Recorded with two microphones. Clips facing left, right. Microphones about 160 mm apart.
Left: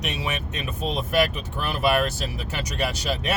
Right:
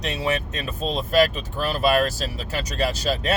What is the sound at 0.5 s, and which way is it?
Speech, 20° left (ahead or behind).